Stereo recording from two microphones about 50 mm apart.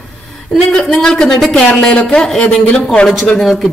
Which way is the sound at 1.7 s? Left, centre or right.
Left.